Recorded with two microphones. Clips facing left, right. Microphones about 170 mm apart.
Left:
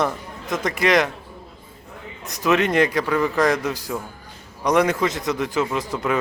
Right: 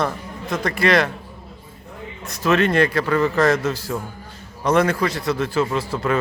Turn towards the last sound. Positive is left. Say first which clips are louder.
# right 1 dB
turn(degrees=15)  # may be behind; listen again after turning